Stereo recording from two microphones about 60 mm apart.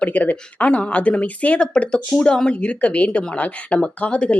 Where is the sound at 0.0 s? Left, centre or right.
Left.